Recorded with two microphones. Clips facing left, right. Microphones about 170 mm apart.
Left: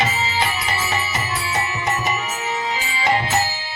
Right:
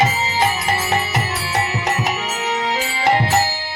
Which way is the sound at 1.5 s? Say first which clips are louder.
Right 4 dB; 70° right (ahead or behind).